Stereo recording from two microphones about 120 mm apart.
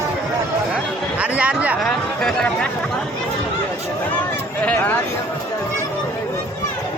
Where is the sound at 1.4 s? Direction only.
10° right (ahead or behind).